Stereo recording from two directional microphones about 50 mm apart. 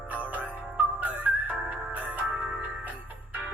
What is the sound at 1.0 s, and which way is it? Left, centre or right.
Music, right.